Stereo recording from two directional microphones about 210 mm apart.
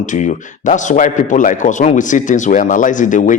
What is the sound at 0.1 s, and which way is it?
A man's voice, 35° left (ahead or behind).